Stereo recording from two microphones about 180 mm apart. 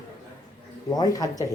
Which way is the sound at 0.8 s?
20° left (ahead or behind).